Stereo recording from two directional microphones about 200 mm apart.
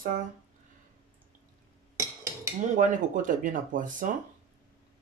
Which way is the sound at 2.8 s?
40° right (ahead or behind).